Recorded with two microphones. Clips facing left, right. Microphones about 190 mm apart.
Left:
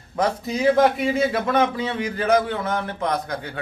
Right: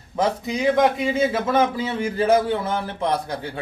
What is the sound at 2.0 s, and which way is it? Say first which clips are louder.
A man's voice: right 2 dB; 25° right (ahead or behind).